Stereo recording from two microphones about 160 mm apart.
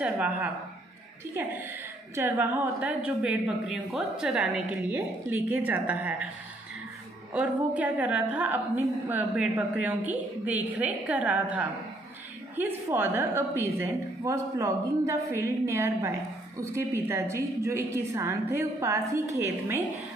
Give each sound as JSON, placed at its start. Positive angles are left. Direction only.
{"t": 0.0, "sound": "a woman's voice", "side_deg": -10}
{"t": 7.3, "sound": "a woman's voice", "side_deg": -10}